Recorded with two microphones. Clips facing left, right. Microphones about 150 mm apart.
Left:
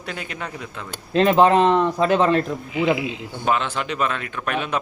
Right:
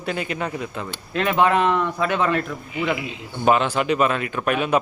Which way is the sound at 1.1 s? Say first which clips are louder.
Left 4 dB; 30° left (ahead or behind).